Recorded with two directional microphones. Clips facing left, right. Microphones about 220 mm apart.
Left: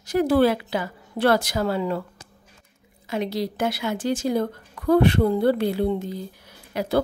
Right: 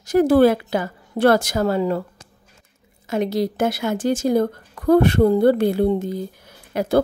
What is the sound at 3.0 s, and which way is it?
Speech, 45° right (ahead or behind).